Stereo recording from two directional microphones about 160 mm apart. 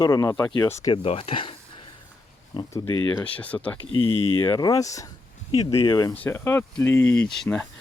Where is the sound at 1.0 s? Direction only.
35° left (ahead or behind).